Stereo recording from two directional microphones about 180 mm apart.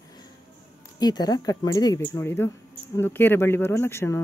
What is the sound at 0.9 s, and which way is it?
Speech, 20° left (ahead or behind).